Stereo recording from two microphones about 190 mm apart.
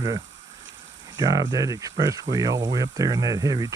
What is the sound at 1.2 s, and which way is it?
Speech, 20° right (ahead or behind).